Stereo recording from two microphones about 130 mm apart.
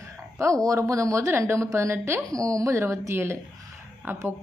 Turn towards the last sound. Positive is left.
turn(degrees=-15)  # may be behind; listen again after turning